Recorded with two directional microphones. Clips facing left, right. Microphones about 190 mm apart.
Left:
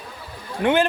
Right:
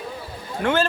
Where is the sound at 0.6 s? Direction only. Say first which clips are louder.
Left 2 dB; 20° left (ahead or behind).